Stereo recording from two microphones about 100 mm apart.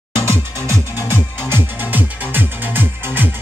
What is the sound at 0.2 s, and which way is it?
Music, 25° right (ahead or behind).